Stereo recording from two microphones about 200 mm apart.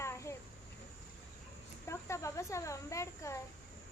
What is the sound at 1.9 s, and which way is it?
A child's voice, 15° left (ahead or behind).